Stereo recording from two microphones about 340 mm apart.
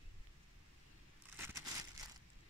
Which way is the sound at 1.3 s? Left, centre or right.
Centre.